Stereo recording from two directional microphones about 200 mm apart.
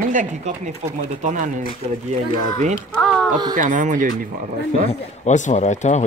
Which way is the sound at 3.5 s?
40° right (ahead or behind).